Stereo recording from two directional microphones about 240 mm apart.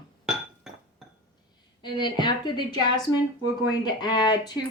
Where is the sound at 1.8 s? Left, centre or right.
Centre.